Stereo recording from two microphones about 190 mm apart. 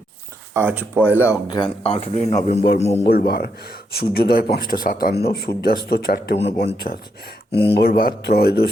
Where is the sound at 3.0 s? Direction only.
55° left (ahead or behind).